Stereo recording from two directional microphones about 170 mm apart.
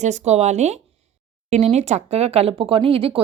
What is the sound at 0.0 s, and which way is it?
Speech, 40° right (ahead or behind).